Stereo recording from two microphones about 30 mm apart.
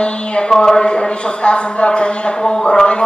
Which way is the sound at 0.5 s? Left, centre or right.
Left.